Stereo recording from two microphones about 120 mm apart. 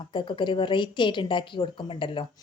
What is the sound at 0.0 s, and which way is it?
Speech, 40° left (ahead or behind).